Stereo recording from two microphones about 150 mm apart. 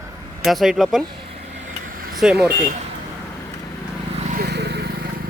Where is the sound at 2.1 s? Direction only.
5° right (ahead or behind).